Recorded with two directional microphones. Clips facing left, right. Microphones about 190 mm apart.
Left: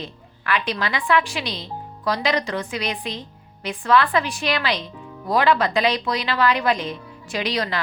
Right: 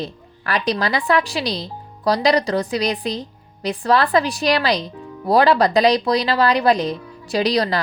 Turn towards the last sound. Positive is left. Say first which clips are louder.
# right 6 dB
turn(degrees=-35)  # may be behind; listen again after turning